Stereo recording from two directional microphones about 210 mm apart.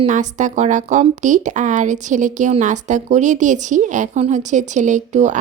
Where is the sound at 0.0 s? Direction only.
35° right (ahead or behind).